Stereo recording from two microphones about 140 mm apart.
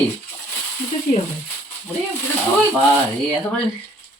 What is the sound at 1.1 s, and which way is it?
Speech, 90° left.